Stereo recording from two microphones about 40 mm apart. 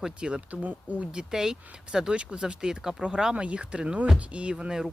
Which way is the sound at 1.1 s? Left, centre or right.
Centre.